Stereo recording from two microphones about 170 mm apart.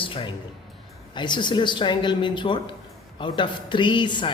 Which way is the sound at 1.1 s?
25° left (ahead or behind).